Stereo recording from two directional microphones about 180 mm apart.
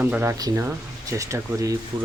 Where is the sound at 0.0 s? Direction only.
10° right (ahead or behind).